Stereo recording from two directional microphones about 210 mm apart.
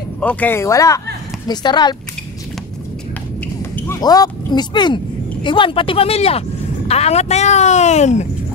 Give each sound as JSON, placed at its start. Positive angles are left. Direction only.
{"t": 0.2, "sound": "speech", "side_deg": 5}
{"t": 3.7, "sound": "speech", "side_deg": 10}